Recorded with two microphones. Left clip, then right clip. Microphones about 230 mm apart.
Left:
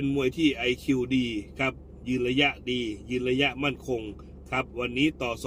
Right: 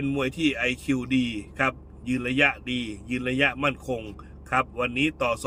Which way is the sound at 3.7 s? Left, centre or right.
Centre.